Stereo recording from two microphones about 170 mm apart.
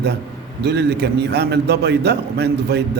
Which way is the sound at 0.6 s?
80° right.